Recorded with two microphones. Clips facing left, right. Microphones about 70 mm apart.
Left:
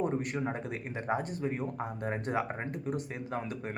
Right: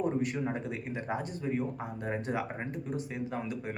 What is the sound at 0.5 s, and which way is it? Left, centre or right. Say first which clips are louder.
Speech: right 1 dB; left.